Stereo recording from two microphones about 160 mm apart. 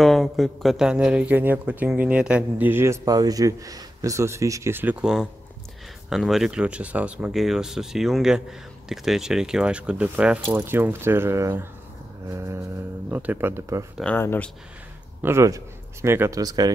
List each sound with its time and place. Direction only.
0.0 s a man's voice: centre (ahead or behind)
6.0 s a man's voice: centre (ahead or behind); by 13.8 s 15° right (ahead or behind)
14.0 s speech: 15° left (ahead or behind)
15.2 s speech: 20° right (ahead or behind)